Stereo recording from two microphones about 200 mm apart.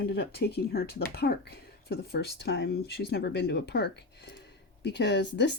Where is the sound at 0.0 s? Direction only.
55° left (ahead or behind).